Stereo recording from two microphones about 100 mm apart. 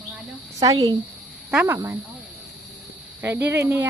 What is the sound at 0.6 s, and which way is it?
Speech, 40° right (ahead or behind).